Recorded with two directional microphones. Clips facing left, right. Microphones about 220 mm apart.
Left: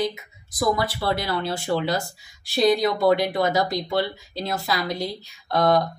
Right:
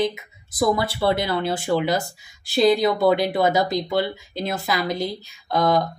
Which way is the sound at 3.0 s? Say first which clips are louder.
Right 1 dB; 25° right (ahead or behind).